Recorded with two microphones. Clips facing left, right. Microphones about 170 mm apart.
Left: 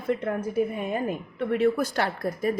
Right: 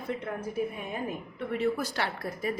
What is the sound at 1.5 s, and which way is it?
Speech, 55° left (ahead or behind).